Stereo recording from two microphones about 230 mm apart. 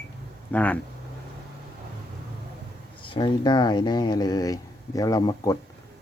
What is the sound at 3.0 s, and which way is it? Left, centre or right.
Speech, left.